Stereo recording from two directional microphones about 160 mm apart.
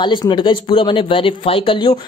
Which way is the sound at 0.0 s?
30° left (ahead or behind).